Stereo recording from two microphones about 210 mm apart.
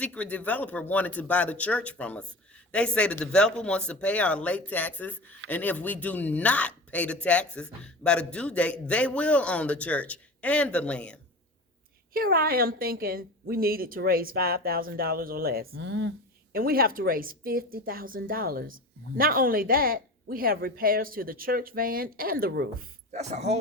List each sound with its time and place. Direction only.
0.0 s speech: 5° left (ahead or behind)
12.1 s a woman's voice: 45° right (ahead or behind)
15.7 s a woman's voice: 60° right (ahead or behind)
23.1 s speech: 30° right (ahead or behind)